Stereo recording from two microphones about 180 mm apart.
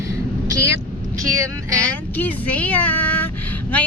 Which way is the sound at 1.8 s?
10° left (ahead or behind).